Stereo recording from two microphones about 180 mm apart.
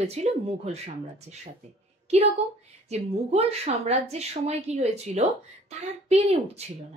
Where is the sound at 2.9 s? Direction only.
35° right (ahead or behind).